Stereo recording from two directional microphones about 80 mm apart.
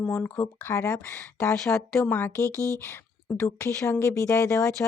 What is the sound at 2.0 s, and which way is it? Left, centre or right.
Speech, left.